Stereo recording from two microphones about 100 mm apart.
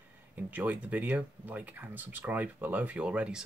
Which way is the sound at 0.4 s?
15° right (ahead or behind).